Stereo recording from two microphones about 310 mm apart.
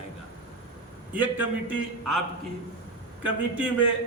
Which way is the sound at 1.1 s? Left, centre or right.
Centre.